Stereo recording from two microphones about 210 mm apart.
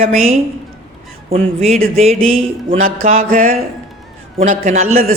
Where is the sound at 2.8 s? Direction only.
40° right (ahead or behind).